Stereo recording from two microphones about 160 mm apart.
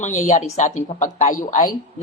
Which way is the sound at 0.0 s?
45° left (ahead or behind).